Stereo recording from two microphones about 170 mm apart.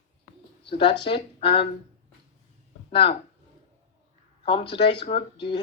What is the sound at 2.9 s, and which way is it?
Speech, 30° left (ahead or behind).